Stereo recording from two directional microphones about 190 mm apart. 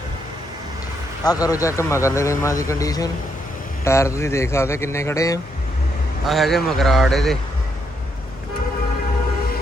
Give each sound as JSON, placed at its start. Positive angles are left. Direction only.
{"t": 1.2, "sound": "a man's voice", "side_deg": 20}
{"t": 6.2, "sound": "speech", "side_deg": 0}